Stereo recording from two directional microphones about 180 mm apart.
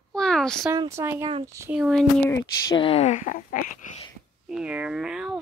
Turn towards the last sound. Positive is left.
turn(degrees=-5)  # may be behind; listen again after turning